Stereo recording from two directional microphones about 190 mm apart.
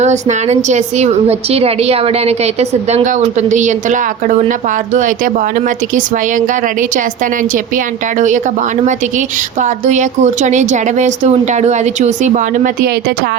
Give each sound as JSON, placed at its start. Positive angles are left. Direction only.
{"t": 0.0, "sound": "a woman's voice", "side_deg": -35}
{"t": 8.2, "sound": "a woman's voice", "side_deg": -40}